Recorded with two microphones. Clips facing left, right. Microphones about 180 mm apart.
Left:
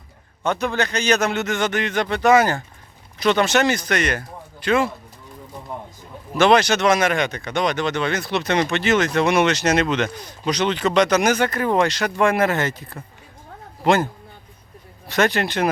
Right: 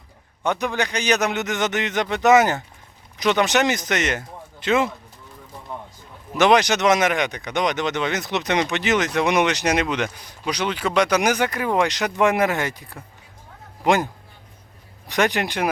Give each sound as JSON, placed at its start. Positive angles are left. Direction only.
{"t": 0.4, "sound": "speech", "side_deg": -15}
{"t": 6.3, "sound": "speech", "side_deg": -15}